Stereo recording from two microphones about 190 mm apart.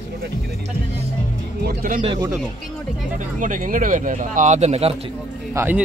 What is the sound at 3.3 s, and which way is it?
Speech, 45° right (ahead or behind).